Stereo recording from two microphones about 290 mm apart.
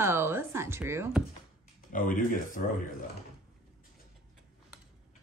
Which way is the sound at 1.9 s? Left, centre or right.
Left.